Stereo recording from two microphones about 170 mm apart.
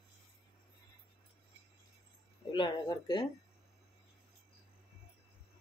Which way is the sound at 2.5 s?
25° left (ahead or behind).